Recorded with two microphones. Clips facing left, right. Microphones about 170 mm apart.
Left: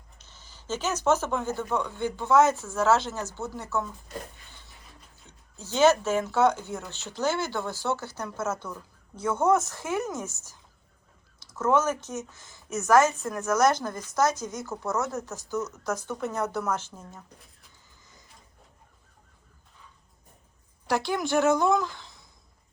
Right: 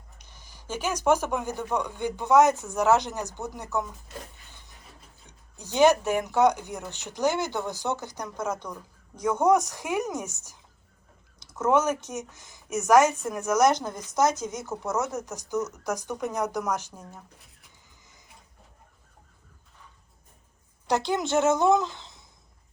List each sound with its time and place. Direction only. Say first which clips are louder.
0.2 s speech: left 1 dB; 15° right (ahead or behind)
4.5 s a sound: even; 15° right (ahead or behind)
5.2 s speech: left 2 dB; 15° right (ahead or behind)
20.8 s a woman's voice: right 1 dB; 20° right (ahead or behind)